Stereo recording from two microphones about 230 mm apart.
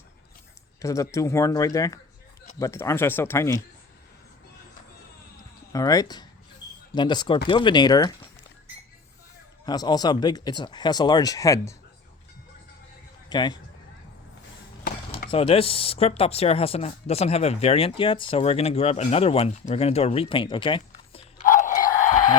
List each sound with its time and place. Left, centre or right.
0.8 s speech: centre
5.7 s speech: centre
9.6 s speech: centre
13.3 s speech: centre
15.3 s speech: left
21.4 s a sound: left